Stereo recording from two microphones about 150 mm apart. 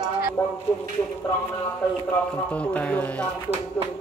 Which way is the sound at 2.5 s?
10° left (ahead or behind).